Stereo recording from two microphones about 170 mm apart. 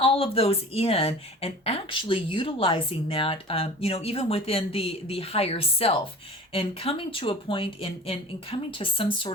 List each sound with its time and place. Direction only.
0.0 s a woman's voice: 35° left (ahead or behind)